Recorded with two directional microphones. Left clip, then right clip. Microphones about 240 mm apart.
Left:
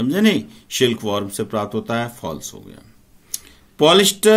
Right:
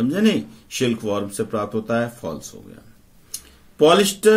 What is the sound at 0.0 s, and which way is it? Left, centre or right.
Speech, left.